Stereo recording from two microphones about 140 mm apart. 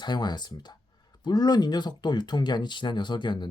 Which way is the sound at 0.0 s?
30° left (ahead or behind).